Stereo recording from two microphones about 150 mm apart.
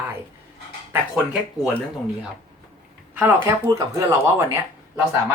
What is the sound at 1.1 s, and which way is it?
Speech, 5° right (ahead or behind).